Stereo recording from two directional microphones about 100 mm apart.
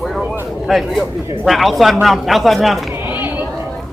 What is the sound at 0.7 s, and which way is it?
Speech, centre (ahead or behind).